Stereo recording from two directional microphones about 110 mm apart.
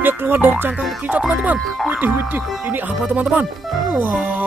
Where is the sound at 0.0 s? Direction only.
20° right (ahead or behind).